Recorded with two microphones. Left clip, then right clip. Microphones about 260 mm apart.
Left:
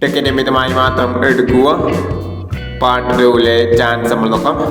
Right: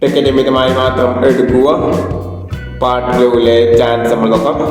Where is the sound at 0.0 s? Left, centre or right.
Left.